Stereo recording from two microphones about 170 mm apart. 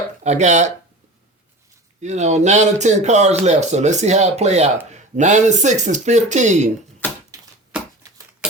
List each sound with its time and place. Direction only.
0.3 s speech: 45° right (ahead or behind)
2.0 s speech: 40° right (ahead or behind)